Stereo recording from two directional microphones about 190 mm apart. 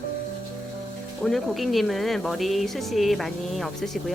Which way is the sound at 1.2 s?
Centre (ahead or behind).